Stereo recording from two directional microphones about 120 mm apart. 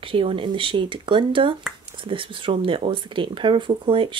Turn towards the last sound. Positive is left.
turn(degrees=-45)  # may be behind; listen again after turning